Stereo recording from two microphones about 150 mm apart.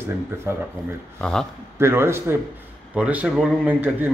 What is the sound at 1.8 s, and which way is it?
A man's voice, 15° right (ahead or behind).